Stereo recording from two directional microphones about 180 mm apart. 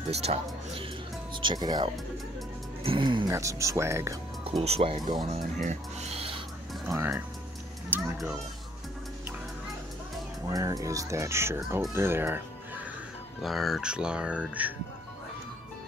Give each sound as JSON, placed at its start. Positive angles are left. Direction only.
{"t": 0.1, "sound": "speech", "side_deg": -35}
{"t": 4.5, "sound": "speech", "side_deg": -30}
{"t": 7.9, "sound": "a sound", "side_deg": -10}
{"t": 10.5, "sound": "speech", "side_deg": -20}
{"t": 13.4, "sound": "speech", "side_deg": 0}